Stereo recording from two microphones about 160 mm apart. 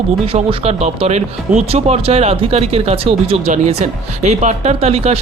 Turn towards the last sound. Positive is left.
turn(degrees=-40)  # may be behind; listen again after turning